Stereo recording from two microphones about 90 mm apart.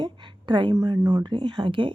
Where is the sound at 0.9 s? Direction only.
50° right (ahead or behind); by 1.9 s 65° right (ahead or behind).